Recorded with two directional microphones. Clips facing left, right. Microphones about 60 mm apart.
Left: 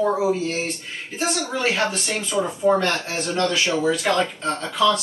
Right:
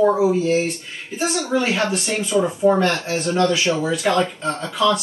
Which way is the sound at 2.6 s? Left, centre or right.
Centre.